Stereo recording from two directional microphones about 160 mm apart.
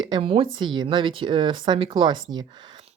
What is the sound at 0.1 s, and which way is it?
Speech, 35° right (ahead or behind).